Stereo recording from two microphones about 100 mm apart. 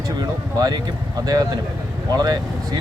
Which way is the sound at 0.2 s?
40° right (ahead or behind).